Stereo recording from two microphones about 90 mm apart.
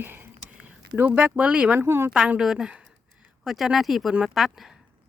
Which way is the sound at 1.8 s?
25° right (ahead or behind).